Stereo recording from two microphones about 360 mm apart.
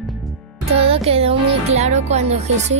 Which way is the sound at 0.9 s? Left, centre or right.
Centre.